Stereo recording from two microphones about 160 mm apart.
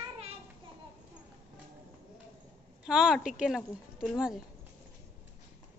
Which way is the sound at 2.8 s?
5° right (ahead or behind).